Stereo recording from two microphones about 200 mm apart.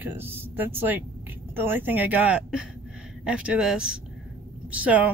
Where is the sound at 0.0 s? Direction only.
10° right (ahead or behind).